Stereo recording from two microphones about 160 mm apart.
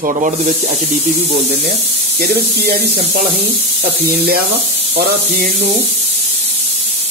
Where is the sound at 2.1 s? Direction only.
75° right (ahead or behind).